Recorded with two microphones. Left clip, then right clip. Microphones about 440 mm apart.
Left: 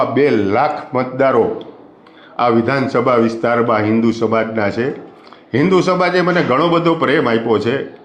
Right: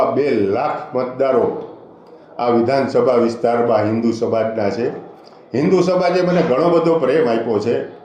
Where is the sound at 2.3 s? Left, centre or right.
Left.